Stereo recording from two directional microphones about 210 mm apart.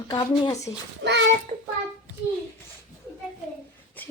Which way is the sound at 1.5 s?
25° right (ahead or behind).